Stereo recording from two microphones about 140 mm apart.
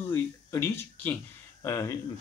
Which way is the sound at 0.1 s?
15° left (ahead or behind).